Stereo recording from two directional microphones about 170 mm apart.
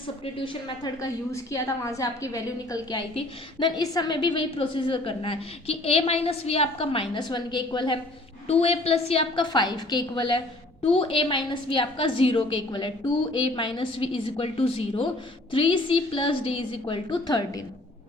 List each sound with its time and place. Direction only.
1.0 s a woman's voice: 20° left (ahead or behind)
8.4 s a woman's voice: 40° left (ahead or behind)